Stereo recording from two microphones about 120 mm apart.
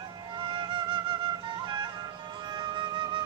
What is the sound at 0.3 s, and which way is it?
Music, 40° right (ahead or behind).